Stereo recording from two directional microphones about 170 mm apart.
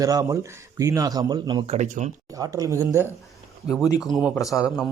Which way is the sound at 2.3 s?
20° right (ahead or behind).